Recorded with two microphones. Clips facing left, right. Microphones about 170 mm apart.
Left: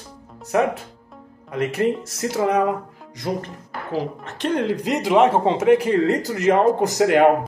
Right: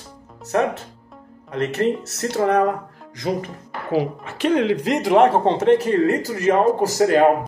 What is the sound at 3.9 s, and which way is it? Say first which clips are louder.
Speech: right 5 dB; 10° right (ahead or behind).